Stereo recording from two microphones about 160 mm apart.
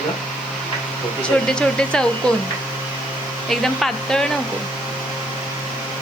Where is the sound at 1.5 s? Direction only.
5° left (ahead or behind).